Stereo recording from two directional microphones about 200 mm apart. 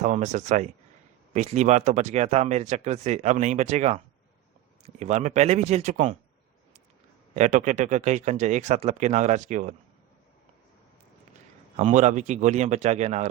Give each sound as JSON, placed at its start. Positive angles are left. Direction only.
{"t": 0.0, "sound": "speech", "side_deg": -35}
{"t": 7.3, "sound": "speech", "side_deg": -40}
{"t": 11.8, "sound": "speech", "side_deg": -35}